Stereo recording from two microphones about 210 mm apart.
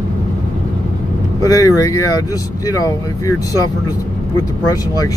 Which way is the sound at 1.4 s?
15° left (ahead or behind).